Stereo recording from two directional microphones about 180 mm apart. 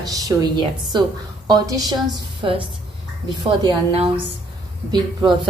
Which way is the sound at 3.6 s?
30° right (ahead or behind).